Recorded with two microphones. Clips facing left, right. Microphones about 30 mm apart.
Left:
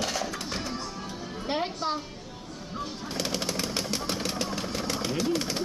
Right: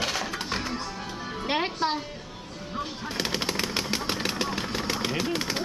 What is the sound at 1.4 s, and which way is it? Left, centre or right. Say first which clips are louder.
Music: right 3 dB; right.